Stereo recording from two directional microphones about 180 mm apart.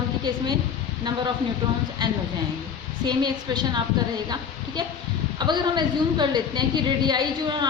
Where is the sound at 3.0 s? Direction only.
25° right (ahead or behind).